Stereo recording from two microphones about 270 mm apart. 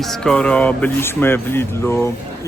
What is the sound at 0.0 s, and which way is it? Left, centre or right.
Speech, centre.